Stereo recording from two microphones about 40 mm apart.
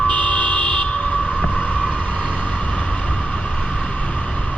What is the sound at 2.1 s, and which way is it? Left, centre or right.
Vehicle, left.